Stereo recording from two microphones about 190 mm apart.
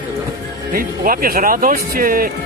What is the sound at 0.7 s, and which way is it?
Speech, 50° right (ahead or behind).